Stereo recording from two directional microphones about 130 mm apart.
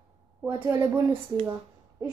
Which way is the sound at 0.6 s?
15° right (ahead or behind).